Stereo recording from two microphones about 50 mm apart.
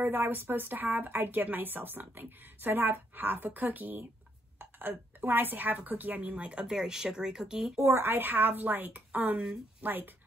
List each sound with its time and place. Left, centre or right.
0.0 s a woman's voice: right; by 7.8 s centre
7.8 s a woman's voice: right